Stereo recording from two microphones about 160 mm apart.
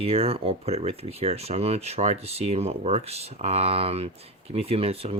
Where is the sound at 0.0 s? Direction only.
40° right (ahead or behind).